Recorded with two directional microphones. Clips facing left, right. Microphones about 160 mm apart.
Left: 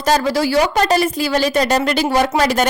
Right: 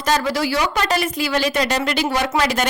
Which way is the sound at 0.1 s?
35° left (ahead or behind).